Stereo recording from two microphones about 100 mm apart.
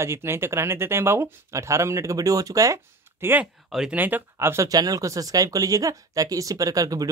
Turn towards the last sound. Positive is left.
turn(degrees=-35)  # may be behind; listen again after turning